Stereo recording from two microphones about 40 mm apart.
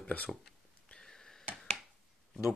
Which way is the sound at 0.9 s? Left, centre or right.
Centre.